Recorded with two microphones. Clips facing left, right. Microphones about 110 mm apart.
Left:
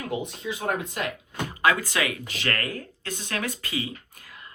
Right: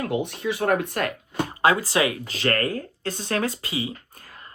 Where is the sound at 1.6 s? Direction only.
35° right (ahead or behind).